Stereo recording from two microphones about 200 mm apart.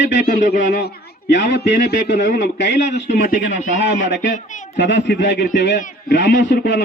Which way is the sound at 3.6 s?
40° left (ahead or behind).